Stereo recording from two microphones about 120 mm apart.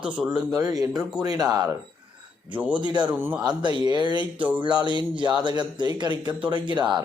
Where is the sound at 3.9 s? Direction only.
40° right (ahead or behind).